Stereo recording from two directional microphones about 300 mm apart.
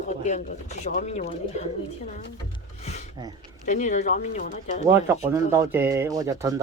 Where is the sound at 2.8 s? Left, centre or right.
Left.